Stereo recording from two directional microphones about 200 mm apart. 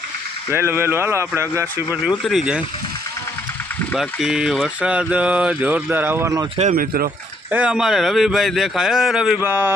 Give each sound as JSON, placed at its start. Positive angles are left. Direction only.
{"t": 0.5, "sound": "speech", "side_deg": -10}
{"t": 3.9, "sound": "speech", "side_deg": 0}
{"t": 6.6, "sound": "speech", "side_deg": -40}
{"t": 7.5, "sound": "speech", "side_deg": -5}